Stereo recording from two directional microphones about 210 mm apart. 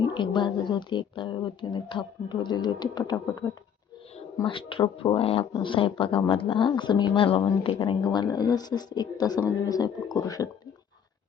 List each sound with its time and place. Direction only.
0.0 s speech: 20° left (ahead or behind)